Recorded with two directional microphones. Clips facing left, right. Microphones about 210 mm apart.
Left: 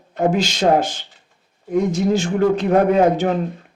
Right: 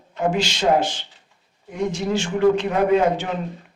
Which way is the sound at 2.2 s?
45° left (ahead or behind).